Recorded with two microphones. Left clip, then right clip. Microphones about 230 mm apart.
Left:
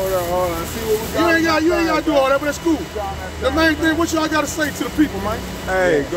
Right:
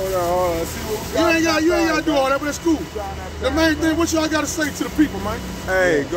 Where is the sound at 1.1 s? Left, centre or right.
Centre.